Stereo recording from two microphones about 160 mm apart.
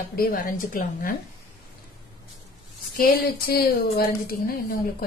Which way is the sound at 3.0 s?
75° left (ahead or behind).